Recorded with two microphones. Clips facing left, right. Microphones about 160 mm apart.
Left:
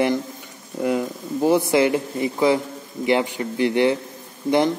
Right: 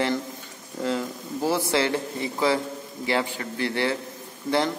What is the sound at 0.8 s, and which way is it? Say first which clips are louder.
A man's voice: left 5 dB; 15° left (ahead or behind).